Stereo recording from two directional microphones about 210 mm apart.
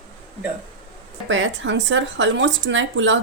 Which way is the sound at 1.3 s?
60° right (ahead or behind).